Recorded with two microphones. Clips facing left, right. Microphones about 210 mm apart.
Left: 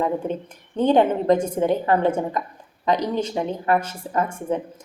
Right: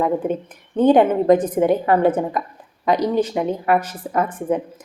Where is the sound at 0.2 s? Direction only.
10° right (ahead or behind).